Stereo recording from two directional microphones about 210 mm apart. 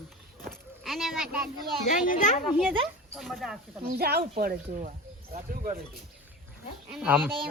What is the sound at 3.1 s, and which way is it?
Speech, centre (ahead or behind).